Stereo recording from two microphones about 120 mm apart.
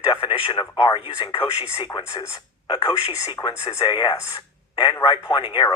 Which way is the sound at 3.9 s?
40° left (ahead or behind).